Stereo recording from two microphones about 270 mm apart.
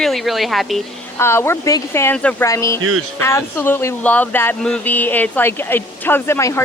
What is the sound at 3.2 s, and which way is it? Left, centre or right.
Speech, centre.